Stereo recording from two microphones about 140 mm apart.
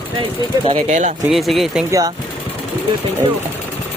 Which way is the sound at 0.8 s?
60° right (ahead or behind).